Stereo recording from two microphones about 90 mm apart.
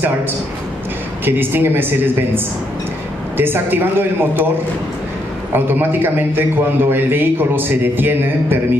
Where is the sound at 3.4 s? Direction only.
25° right (ahead or behind).